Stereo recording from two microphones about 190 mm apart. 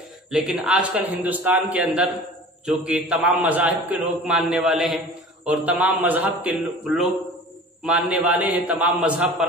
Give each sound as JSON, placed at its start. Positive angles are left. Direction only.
{"t": 0.3, "sound": "a man's voice", "side_deg": -5}